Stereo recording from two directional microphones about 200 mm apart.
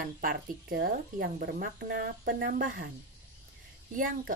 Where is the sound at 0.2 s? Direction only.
45° right (ahead or behind).